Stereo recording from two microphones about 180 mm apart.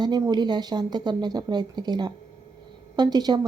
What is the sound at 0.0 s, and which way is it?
Speech, 25° right (ahead or behind).